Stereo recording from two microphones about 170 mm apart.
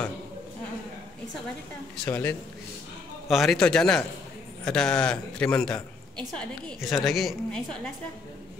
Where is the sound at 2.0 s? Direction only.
15° left (ahead or behind).